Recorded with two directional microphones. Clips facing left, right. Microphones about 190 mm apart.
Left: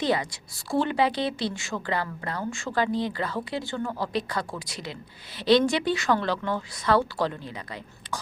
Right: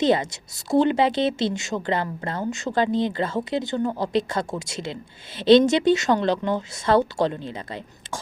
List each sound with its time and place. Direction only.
0.0 s a woman's voice: 25° right (ahead or behind)